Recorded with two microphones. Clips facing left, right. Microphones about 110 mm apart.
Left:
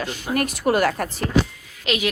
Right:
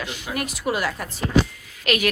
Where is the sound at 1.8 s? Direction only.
20° left (ahead or behind).